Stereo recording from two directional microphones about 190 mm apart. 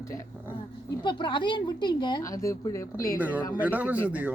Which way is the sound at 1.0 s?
25° left (ahead or behind).